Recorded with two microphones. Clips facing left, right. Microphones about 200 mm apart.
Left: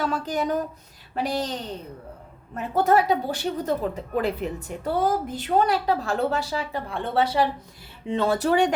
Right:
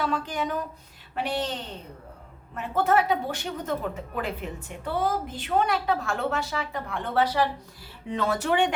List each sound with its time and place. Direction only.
0.0 s a woman's voice: 40° left (ahead or behind)
2.6 s a woman's voice: 40° left (ahead or behind)